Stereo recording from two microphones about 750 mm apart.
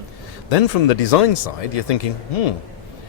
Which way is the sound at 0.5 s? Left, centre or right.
Left.